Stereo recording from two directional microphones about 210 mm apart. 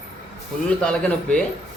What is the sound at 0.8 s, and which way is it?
Speech, 5° left (ahead or behind).